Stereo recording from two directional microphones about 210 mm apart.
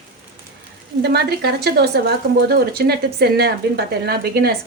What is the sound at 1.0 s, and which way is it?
A woman's voice, 50° right (ahead or behind).